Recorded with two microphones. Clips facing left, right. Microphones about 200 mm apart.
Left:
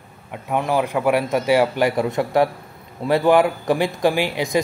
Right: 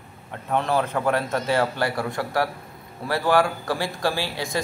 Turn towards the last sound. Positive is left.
turn(degrees=15)  # may be behind; listen again after turning